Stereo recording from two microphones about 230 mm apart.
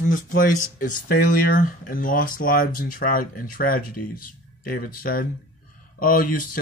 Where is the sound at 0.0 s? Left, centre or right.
Left.